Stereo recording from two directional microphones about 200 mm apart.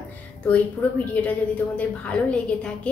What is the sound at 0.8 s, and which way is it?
Speech, 10° left (ahead or behind).